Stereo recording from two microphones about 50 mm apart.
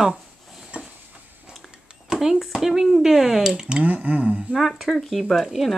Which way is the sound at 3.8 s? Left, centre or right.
Right.